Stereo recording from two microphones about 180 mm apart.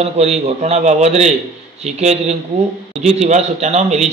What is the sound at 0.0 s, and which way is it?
A man's voice, 35° right (ahead or behind).